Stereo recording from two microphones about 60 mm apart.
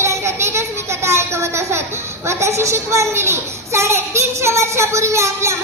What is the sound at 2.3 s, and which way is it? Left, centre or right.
A child's voice, right.